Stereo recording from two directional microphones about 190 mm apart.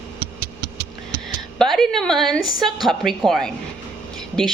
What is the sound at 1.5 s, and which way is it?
A woman's voice, centre (ahead or behind).